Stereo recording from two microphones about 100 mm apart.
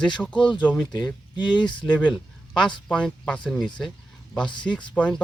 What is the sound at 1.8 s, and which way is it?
Speech, 10° left (ahead or behind).